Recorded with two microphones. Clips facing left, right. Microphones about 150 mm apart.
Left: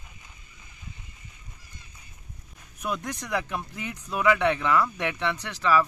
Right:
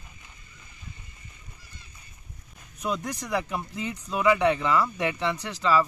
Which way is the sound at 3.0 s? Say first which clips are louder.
Right 1 dB; 10° right (ahead or behind).